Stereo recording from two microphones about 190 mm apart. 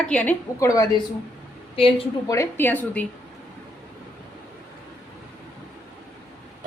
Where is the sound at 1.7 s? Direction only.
30° left (ahead or behind).